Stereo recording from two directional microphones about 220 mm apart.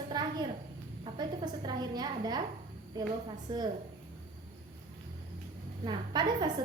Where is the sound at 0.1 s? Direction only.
15° right (ahead or behind).